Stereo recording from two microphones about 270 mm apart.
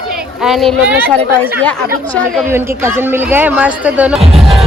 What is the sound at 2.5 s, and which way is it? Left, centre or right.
Speech, centre.